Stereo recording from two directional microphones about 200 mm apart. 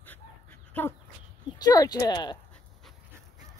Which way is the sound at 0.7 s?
10° left (ahead or behind).